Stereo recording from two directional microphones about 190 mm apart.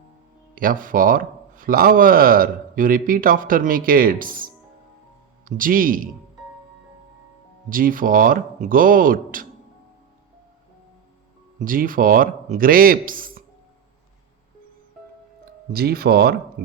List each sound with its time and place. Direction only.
0.5 s a man's voice: 45° right (ahead or behind)
7.7 s a man's voice: 45° right (ahead or behind)
11.6 s a man's voice: 45° right (ahead or behind)
15.7 s a man's voice: 55° right (ahead or behind)